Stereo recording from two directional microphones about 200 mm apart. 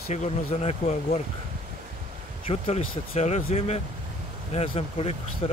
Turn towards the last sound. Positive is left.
turn(degrees=30)  # may be behind; listen again after turning